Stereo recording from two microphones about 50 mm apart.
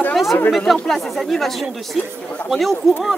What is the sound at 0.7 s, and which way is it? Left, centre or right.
Speech, centre.